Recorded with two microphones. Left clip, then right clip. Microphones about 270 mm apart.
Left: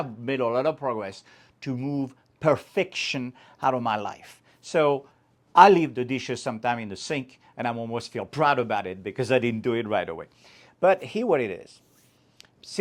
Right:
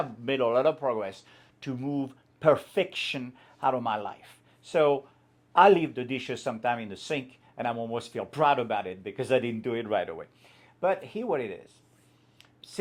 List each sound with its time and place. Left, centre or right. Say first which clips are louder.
0.0 s speech: even; left